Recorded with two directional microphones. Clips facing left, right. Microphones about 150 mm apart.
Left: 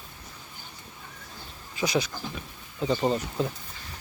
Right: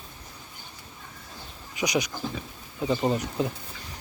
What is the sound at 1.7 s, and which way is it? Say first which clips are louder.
Speech: even; 15° right (ahead or behind).